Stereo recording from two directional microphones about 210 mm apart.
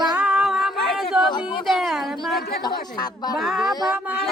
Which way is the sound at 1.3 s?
20° left (ahead or behind).